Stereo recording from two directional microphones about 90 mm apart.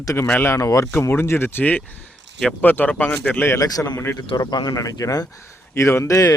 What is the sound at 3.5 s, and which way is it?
Speech, 45° left (ahead or behind).